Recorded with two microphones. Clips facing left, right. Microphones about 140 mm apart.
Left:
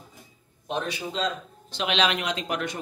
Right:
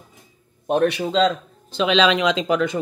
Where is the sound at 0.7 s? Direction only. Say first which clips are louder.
Right 11 dB; 60° right (ahead or behind); by 1.3 s 90° right.